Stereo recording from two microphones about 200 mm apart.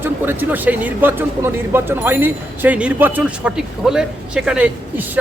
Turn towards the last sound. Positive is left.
turn(degrees=-10)  # may be behind; listen again after turning